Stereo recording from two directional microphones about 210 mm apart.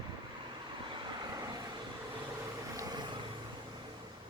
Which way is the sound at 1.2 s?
20° right (ahead or behind).